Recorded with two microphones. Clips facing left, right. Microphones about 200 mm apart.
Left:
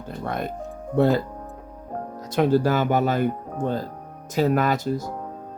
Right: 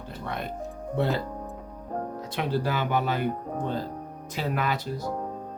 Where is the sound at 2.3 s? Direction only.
45° left (ahead or behind).